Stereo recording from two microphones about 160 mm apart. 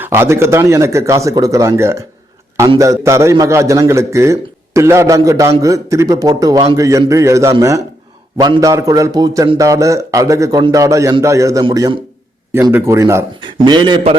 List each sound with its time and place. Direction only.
0.0 s a man's voice: 15° right (ahead or behind)
13.7 s a man's voice: 30° right (ahead or behind)